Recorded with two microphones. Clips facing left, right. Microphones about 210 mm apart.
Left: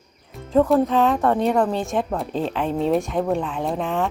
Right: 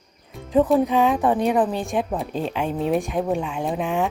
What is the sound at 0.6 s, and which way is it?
Speech, 15° right (ahead or behind).